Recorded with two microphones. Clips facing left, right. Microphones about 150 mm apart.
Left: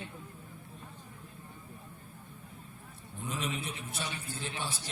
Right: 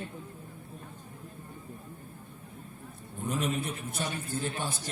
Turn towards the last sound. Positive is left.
turn(degrees=-45)  # may be behind; listen again after turning